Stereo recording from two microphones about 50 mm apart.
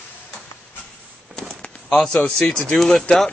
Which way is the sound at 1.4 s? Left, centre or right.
Centre.